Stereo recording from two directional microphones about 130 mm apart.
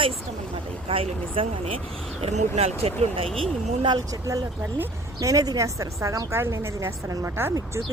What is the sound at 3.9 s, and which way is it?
A woman's voice, 25° right (ahead or behind).